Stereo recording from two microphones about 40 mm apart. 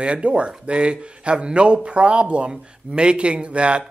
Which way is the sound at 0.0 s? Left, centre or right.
Right.